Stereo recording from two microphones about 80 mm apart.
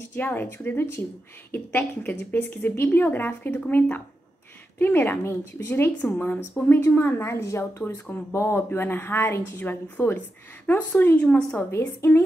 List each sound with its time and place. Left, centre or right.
0.1 s speech: left
11.7 s a woman's voice: left